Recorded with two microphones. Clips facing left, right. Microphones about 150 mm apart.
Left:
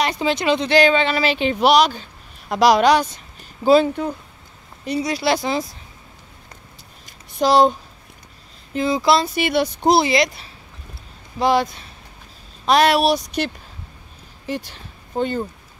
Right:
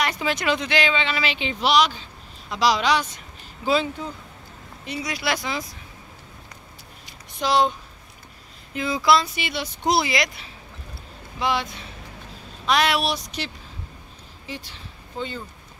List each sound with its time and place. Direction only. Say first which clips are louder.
0.0 s speech: left 4 dB; 25° left (ahead or behind)
7.1 s a sound: left 6 dB; 40° left (ahead or behind)
8.7 s speech: left 3 dB; 30° left (ahead or behind)
9.3 s speech: left 11 dB; 55° left (ahead or behind)
9.8 s speech: left 5 dB; 30° left (ahead or behind)
14.4 s speech: left 9 dB; 50° left (ahead or behind)